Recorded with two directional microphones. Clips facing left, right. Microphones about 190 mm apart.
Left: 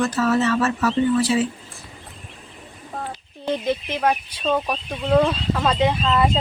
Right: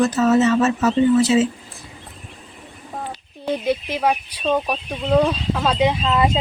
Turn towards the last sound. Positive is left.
turn(degrees=-10)  # may be behind; listen again after turning